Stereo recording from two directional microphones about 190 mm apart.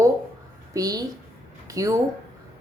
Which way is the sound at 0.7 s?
20° right (ahead or behind).